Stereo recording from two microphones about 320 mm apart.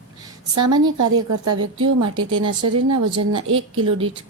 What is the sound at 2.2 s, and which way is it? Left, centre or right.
A woman's voice, right.